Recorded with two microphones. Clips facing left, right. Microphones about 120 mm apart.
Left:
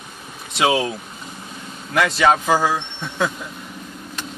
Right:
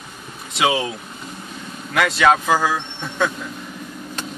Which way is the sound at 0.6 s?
Centre (ahead or behind).